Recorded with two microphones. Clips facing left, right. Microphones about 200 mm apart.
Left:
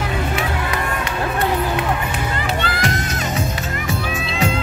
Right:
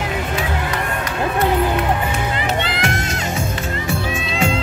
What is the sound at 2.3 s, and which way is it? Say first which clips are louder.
Music: right 1 dB; 20° right (ahead or behind).